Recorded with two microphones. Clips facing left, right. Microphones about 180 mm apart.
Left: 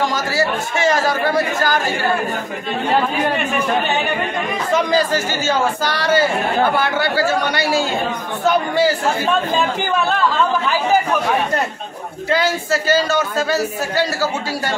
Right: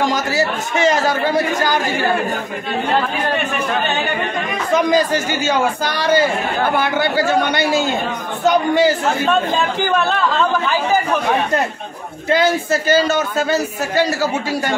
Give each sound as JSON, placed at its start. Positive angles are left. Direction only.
{"t": 0.1, "sound": "a man's voice", "side_deg": -20}
{"t": 4.9, "sound": "a man's voice", "side_deg": -15}
{"t": 12.3, "sound": "a man's voice", "side_deg": -20}